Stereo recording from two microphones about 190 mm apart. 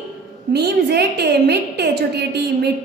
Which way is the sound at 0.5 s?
60° right (ahead or behind).